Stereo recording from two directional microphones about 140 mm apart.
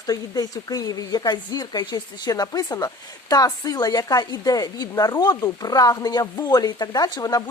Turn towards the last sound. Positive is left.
turn(degrees=25)  # may be behind; listen again after turning